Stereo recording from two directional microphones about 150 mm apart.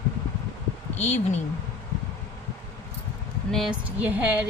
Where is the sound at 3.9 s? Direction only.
10° right (ahead or behind).